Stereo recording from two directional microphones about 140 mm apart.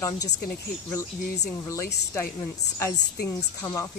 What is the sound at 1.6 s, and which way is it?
Speech, 20° left (ahead or behind).